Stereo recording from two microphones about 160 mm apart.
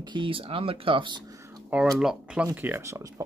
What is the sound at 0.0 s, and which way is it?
Speech, 30° right (ahead or behind).